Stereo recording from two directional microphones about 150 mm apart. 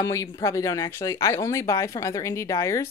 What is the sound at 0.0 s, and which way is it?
A woman's voice, 20° left (ahead or behind).